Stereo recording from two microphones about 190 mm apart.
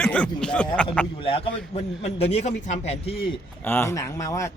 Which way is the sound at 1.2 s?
30° left (ahead or behind).